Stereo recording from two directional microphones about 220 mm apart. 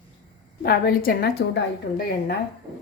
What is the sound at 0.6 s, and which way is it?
Speech, 40° left (ahead or behind).